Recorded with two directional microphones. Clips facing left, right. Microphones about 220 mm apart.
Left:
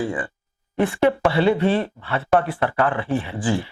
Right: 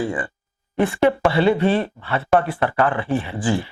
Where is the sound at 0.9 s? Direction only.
25° right (ahead or behind).